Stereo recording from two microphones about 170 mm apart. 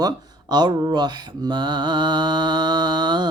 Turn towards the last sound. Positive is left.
turn(degrees=-25)  # may be behind; listen again after turning